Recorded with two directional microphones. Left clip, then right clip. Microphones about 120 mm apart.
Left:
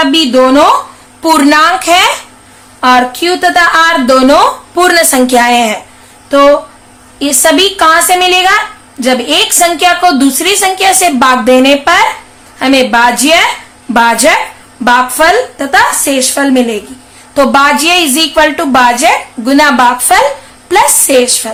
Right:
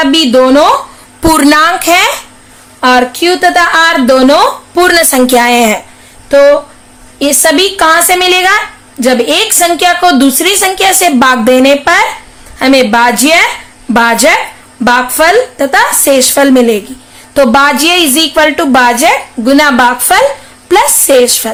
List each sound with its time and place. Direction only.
0.0 s a woman's voice: 30° right (ahead or behind)
1.2 s speech: 60° right (ahead or behind); by 2.1 s 40° right (ahead or behind)
2.8 s a woman's voice: 20° right (ahead or behind); by 5.8 s 45° right (ahead or behind)
7.2 s a woman's voice: 25° right (ahead or behind)
16.0 s a woman's voice: 40° right (ahead or behind)